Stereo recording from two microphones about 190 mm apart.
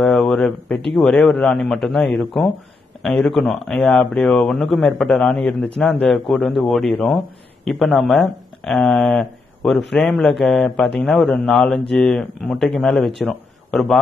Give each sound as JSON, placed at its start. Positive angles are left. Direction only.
{"t": 0.0, "sound": "speech", "side_deg": 5}